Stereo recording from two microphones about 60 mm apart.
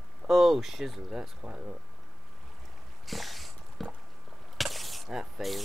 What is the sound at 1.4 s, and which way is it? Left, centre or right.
Speech, centre.